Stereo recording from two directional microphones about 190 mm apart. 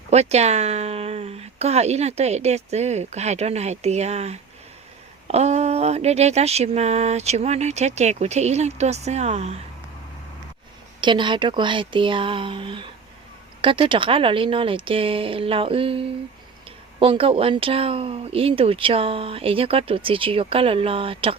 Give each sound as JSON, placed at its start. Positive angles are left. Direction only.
{"t": 0.1, "sound": "speech", "side_deg": -35}
{"t": 11.0, "sound": "speech", "side_deg": -25}